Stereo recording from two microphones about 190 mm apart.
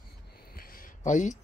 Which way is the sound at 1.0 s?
40° left (ahead or behind).